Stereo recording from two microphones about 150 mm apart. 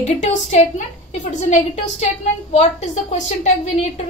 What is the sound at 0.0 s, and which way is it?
A woman's voice, 50° left (ahead or behind).